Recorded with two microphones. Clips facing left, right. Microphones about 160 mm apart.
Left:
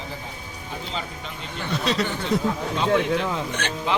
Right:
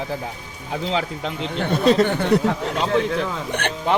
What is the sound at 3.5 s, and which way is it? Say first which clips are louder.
Speech: right 4 dB; 60° right (ahead or behind).